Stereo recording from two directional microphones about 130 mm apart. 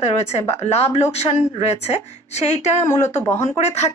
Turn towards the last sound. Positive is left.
turn(degrees=55)  # may be behind; listen again after turning